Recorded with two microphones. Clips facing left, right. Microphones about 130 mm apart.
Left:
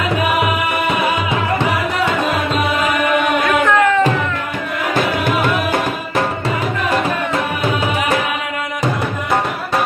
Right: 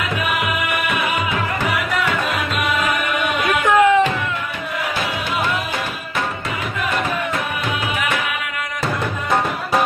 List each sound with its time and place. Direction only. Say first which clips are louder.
0.4 s music: left 5 dB; 30° left (ahead or behind)
2.2 s tabla: left 4 dB; 35° left (ahead or behind)
3.6 s music: right 4 dB; 15° right (ahead or behind)
4.9 s music: left 9 dB; 55° left (ahead or behind)